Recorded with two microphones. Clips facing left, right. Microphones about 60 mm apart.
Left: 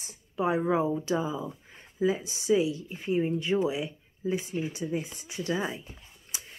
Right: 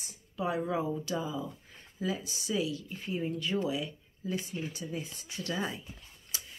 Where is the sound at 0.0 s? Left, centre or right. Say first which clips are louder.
Left 5 dB; left.